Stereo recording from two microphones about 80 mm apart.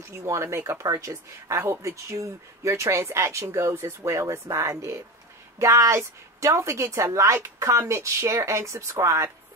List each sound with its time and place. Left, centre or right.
0.1 s speech: right